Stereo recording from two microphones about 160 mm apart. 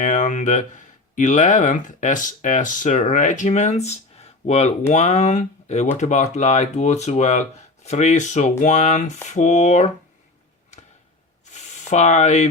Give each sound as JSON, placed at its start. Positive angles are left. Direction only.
{"t": 0.0, "sound": "speech", "side_deg": 50}
{"t": 11.5, "sound": "spray", "side_deg": 45}